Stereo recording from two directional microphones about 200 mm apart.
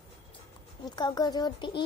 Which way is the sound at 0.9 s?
20° left (ahead or behind).